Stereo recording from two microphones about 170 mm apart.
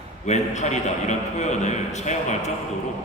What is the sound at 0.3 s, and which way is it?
A man's voice, 45° left (ahead or behind).